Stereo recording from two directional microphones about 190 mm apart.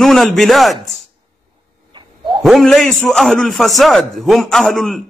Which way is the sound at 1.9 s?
25° right (ahead or behind).